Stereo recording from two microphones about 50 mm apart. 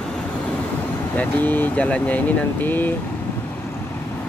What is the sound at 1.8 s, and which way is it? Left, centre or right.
Speech, left.